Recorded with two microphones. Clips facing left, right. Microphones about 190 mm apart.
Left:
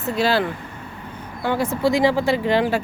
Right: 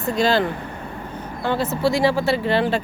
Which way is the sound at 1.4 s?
15° left (ahead or behind).